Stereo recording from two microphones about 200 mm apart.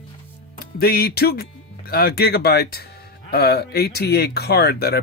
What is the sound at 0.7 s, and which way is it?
Speech, 50° left (ahead or behind).